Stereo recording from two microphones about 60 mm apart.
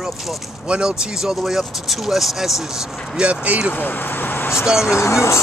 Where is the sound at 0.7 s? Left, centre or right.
Centre.